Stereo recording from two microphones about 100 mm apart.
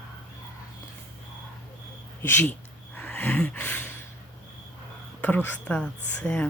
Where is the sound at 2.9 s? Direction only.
15° left (ahead or behind).